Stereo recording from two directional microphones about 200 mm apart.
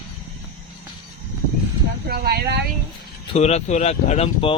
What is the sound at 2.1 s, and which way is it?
Speech, 55° right (ahead or behind).